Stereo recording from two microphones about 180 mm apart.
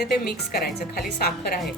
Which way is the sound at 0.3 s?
60° left (ahead or behind).